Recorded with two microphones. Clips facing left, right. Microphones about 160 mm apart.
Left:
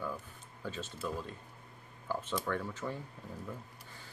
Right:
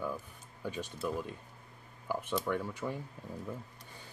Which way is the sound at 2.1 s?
15° right (ahead or behind).